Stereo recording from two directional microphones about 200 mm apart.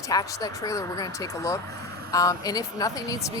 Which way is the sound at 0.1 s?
15° left (ahead or behind).